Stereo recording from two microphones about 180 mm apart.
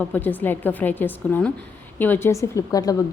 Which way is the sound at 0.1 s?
10° left (ahead or behind).